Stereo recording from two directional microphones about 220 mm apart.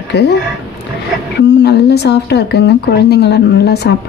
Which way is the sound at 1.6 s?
50° left (ahead or behind).